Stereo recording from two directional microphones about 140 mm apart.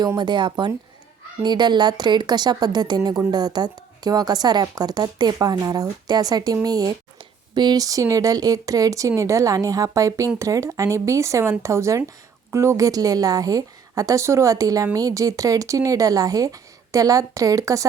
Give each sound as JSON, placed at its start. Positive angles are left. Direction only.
{"t": 0.2, "sound": "speech", "side_deg": -35}